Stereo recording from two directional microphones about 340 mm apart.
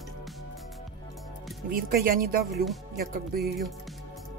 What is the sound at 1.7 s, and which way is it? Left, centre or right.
Speech, right.